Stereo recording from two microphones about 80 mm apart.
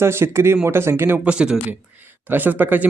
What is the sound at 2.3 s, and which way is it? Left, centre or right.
Speech, right.